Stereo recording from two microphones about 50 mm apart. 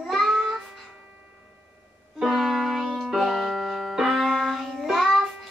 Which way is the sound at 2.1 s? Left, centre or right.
Centre.